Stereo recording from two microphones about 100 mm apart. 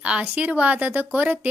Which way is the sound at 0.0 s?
15° right (ahead or behind).